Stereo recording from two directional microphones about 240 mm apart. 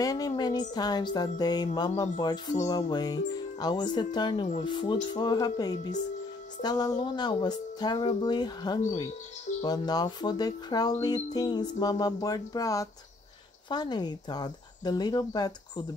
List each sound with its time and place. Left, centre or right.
0.0 s music: centre
4.6 s speech: centre
5.0 s music: centre